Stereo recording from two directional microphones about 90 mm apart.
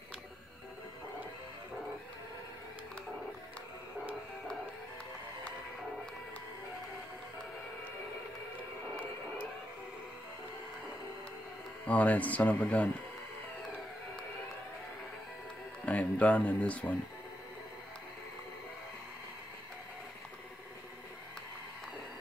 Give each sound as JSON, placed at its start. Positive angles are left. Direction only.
{"t": 11.8, "sound": "speech", "side_deg": 15}
{"t": 15.8, "sound": "speech", "side_deg": 15}